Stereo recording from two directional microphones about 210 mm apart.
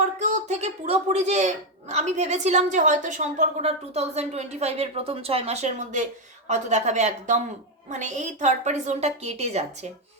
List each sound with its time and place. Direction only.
0.0 s a woman's voice: 35° right (ahead or behind)